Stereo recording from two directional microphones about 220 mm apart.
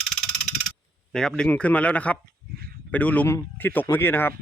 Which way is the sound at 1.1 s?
5° left (ahead or behind).